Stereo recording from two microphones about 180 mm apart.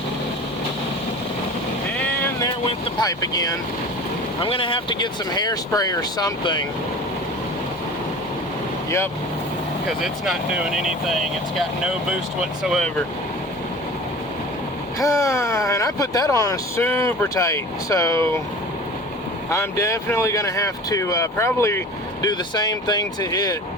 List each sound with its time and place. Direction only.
2.0 s music: 10° left (ahead or behind)
3.0 s speech: 20° left (ahead or behind)
10.0 s speech: centre (ahead or behind)
14.9 s speech: 15° left (ahead or behind)
19.5 s speech: 15° left (ahead or behind)